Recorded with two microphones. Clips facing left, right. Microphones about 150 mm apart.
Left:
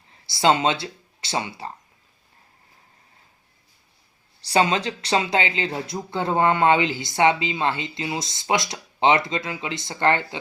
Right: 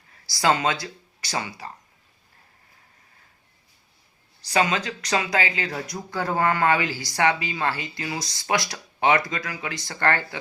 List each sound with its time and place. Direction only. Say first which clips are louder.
0.1 s speech: left 3 dB; 25° left (ahead or behind)
4.4 s speech: left 3 dB; 30° left (ahead or behind)